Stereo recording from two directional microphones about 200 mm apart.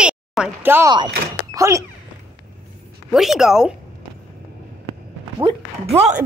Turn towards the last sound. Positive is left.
turn(degrees=-30)  # may be behind; listen again after turning